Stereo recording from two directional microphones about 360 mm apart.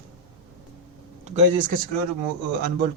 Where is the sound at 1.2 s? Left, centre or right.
Right.